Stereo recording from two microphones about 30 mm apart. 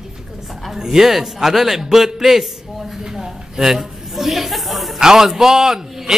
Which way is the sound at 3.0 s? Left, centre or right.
Centre.